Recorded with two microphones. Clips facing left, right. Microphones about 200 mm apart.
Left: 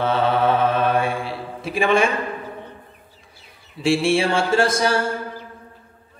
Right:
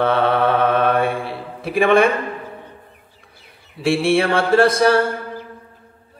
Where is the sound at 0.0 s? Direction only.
60° right (ahead or behind).